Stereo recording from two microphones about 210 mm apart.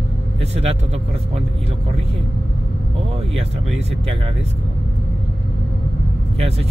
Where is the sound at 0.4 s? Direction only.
30° right (ahead or behind).